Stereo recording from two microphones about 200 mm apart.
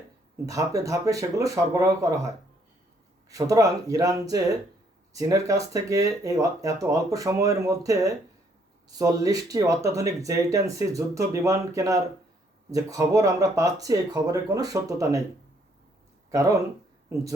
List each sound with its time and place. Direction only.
0.4 s speech: 15° right (ahead or behind)
16.3 s speech: 15° right (ahead or behind)